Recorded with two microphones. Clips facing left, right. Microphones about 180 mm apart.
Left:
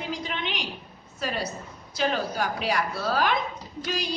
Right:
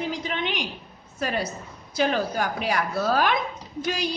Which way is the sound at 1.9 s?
50° right (ahead or behind).